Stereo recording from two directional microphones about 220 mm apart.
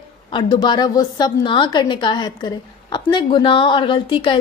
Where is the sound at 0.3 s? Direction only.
20° left (ahead or behind).